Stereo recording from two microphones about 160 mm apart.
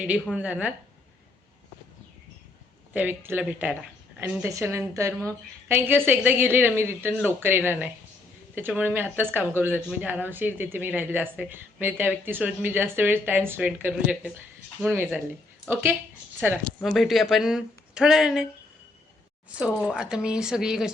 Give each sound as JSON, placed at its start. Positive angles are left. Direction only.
{"t": 0.3, "sound": "speech", "side_deg": -10}
{"t": 2.9, "sound": "speech", "side_deg": -10}
{"t": 16.8, "sound": "speech", "side_deg": 0}
{"t": 19.5, "sound": "speech", "side_deg": -5}